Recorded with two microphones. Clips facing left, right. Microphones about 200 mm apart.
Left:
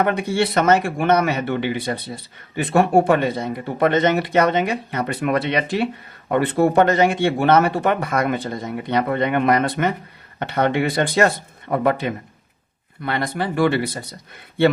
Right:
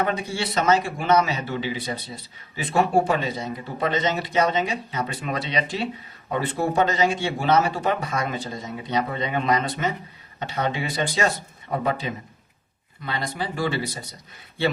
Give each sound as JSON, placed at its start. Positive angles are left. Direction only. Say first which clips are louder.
{"t": 0.0, "sound": "speech", "louder": "left 6 dB", "side_deg": 55}